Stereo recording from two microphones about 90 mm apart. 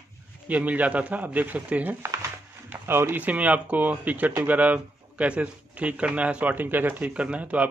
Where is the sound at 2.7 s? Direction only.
25° right (ahead or behind).